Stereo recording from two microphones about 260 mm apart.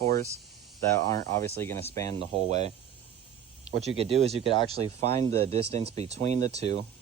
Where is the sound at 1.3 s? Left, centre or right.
Centre.